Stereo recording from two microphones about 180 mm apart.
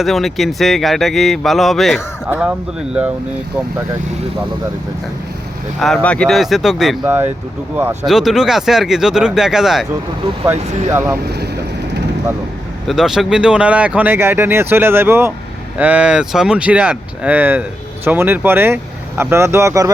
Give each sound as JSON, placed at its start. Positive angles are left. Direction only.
{"t": 0.0, "sound": "speech", "side_deg": 0}
{"t": 5.8, "sound": "speech", "side_deg": 5}
{"t": 7.0, "sound": "speech", "side_deg": -10}
{"t": 8.0, "sound": "speech", "side_deg": 0}
{"t": 10.4, "sound": "speech", "side_deg": -15}
{"t": 11.3, "sound": "speech", "side_deg": -65}
{"t": 12.9, "sound": "speech", "side_deg": 0}